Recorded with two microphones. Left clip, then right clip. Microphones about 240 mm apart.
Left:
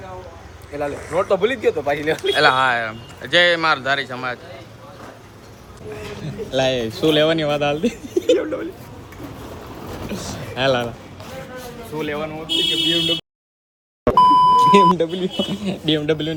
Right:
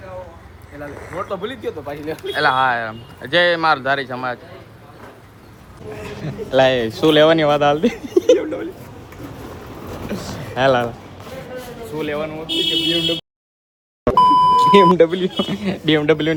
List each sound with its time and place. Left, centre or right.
1.1 s speech: left
2.3 s speech: centre
6.0 s speech: centre
8.3 s a sound: centre
10.0 s a sound: centre
11.9 s speech: centre